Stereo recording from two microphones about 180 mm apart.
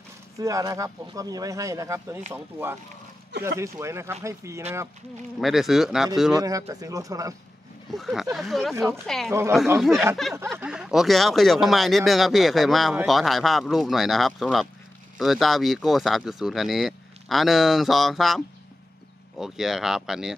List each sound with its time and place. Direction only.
0.4 s speech: 20° right (ahead or behind)
5.4 s speech: centre (ahead or behind)
6.4 s speech: 20° right (ahead or behind)
7.9 s speech: centre (ahead or behind)